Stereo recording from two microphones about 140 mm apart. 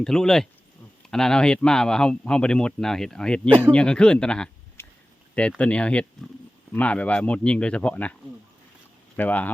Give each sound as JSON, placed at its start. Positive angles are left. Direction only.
{"t": 0.0, "sound": "a man's voice", "side_deg": 5}
{"t": 4.8, "sound": "a sound", "side_deg": 15}
{"t": 5.3, "sound": "speech", "side_deg": 10}
{"t": 9.1, "sound": "speech", "side_deg": 10}